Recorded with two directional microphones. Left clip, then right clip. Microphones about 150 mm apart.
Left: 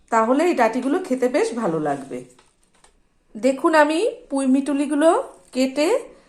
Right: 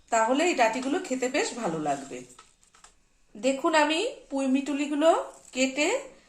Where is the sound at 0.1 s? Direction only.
45° left (ahead or behind).